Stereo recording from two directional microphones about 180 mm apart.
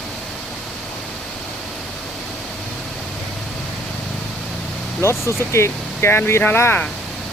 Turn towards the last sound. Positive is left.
turn(degrees=0)  # may be behind; listen again after turning